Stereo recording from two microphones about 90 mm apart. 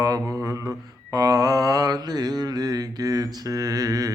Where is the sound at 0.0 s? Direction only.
40° right (ahead or behind).